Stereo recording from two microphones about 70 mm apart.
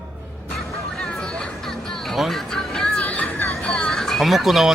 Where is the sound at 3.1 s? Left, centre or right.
Left.